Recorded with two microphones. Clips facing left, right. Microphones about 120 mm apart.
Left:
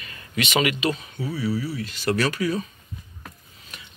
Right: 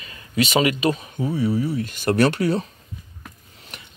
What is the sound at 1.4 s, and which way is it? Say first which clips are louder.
Speech: right 4 dB; 50° right (ahead or behind).